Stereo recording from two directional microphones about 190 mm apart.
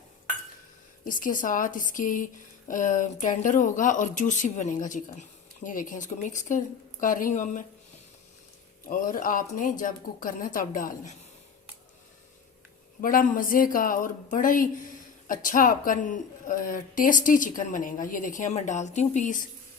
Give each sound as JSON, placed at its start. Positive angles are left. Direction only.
{"t": 1.0, "sound": "speech", "side_deg": 45}
{"t": 8.8, "sound": "speech", "side_deg": 45}
{"t": 13.0, "sound": "speech", "side_deg": 45}